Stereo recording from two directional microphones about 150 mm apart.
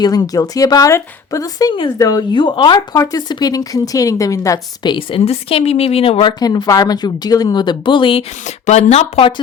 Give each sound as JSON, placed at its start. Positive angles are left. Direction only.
{"t": 0.0, "sound": "speech", "side_deg": 25}
{"t": 2.3, "sound": "speech", "side_deg": 35}
{"t": 6.4, "sound": "speech", "side_deg": 25}
{"t": 8.4, "sound": "speech", "side_deg": 50}